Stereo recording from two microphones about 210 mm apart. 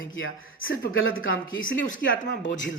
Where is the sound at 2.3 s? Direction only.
55° left (ahead or behind).